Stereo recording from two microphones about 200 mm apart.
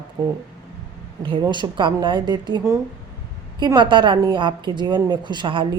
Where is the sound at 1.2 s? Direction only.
25° right (ahead or behind).